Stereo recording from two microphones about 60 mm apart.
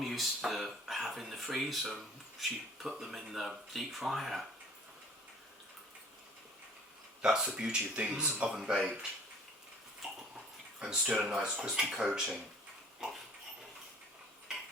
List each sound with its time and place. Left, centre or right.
0.0 s speech: centre
7.2 s speech: centre
10.8 s speech: centre